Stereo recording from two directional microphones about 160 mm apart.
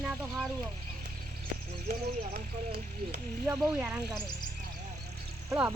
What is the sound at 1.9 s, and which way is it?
Snake, 65° right (ahead or behind).